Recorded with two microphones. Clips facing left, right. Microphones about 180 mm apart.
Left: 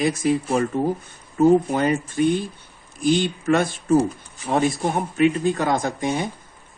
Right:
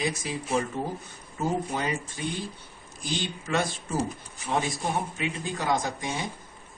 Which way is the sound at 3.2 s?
55° left (ahead or behind).